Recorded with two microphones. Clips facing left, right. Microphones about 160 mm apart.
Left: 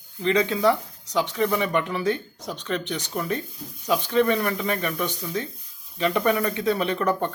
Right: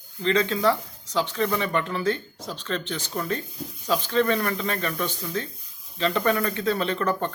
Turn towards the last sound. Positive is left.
turn(degrees=15)  # may be behind; listen again after turning